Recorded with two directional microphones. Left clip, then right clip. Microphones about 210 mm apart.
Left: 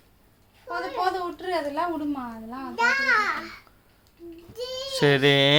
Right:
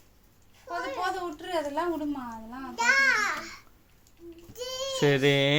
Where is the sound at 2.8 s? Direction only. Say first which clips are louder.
Left 2 dB; 5° left (ahead or behind).